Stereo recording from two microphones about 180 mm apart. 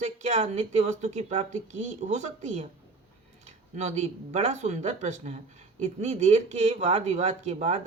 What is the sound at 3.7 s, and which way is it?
Speech, 40° right (ahead or behind).